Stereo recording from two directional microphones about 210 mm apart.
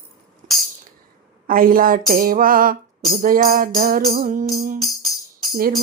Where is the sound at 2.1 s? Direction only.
40° right (ahead or behind).